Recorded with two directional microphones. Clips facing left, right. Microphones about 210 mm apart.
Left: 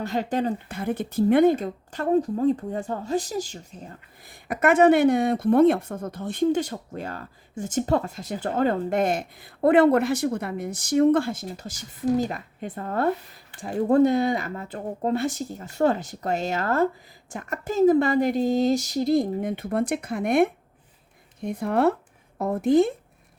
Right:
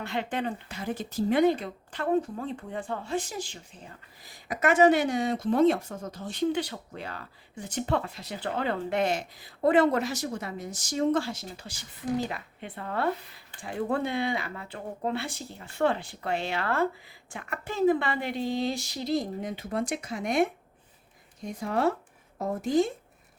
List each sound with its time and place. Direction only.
0.0 s speech: 40° left (ahead or behind); by 22.9 s 60° left (ahead or behind)